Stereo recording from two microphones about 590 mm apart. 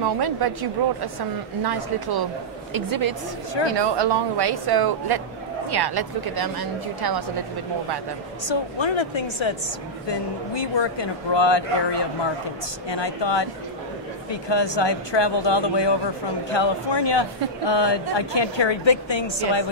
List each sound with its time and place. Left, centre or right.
0.0 s a woman's voice: right
8.5 s speech: left